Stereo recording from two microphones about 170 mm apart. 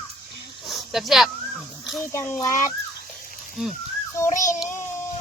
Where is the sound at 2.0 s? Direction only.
15° left (ahead or behind).